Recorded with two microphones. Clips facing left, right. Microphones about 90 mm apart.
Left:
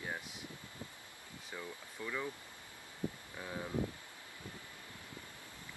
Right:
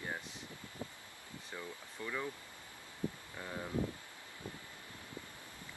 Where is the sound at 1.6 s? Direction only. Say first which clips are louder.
Even; 5° right (ahead or behind).